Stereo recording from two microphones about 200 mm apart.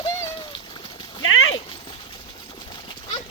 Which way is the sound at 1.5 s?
25° left (ahead or behind).